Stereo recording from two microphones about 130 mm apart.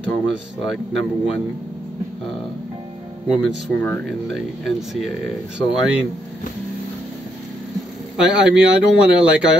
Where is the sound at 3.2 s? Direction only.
5° right (ahead or behind).